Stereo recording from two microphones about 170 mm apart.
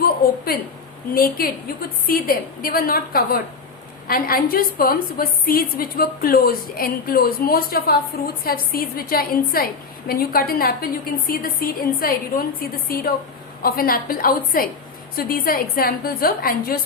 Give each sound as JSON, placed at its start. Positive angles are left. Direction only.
{"t": 0.5, "sound": "a woman's voice", "side_deg": 60}